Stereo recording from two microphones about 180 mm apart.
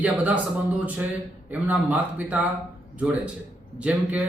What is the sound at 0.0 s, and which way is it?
Speech, 10° right (ahead or behind).